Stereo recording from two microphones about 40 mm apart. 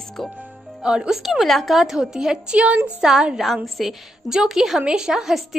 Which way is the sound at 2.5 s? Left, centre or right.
Right.